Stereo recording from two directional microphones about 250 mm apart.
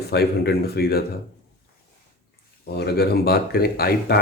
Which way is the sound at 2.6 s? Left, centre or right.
Left.